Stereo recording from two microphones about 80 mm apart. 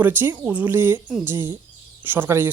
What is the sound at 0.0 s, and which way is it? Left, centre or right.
Speech, right.